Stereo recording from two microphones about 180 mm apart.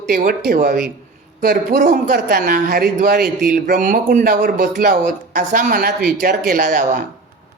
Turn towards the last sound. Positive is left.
turn(degrees=-50)  # may be behind; listen again after turning